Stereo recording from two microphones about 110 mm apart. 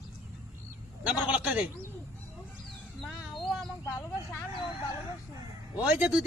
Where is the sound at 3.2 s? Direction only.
Centre (ahead or behind).